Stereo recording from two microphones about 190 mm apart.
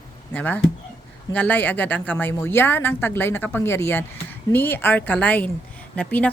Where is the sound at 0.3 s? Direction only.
10° left (ahead or behind).